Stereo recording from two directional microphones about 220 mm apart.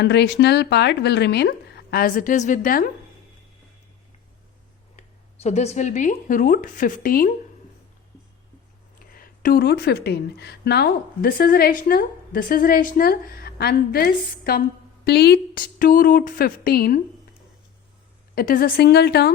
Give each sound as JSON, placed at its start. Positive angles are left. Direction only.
{"t": 0.0, "sound": "speech", "side_deg": 50}
{"t": 4.9, "sound": "speech", "side_deg": 30}
{"t": 9.1, "sound": "speech", "side_deg": 40}
{"t": 18.3, "sound": "speech", "side_deg": 40}